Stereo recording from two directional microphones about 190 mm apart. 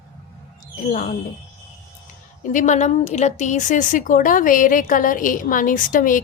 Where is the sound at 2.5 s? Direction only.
40° left (ahead or behind).